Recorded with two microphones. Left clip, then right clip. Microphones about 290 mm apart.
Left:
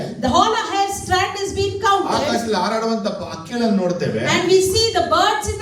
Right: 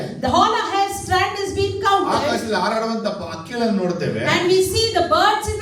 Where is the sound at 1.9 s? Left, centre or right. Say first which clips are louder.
Even; left.